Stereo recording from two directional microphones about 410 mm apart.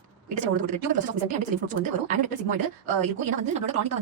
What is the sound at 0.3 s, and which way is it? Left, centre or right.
Speech, centre.